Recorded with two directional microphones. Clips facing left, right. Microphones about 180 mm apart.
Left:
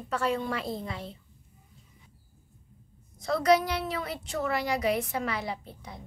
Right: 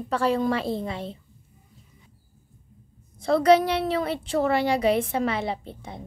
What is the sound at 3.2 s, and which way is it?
A child's voice, 30° right (ahead or behind).